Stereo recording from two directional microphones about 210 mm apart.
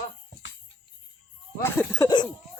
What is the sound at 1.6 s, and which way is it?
Speech, 15° left (ahead or behind).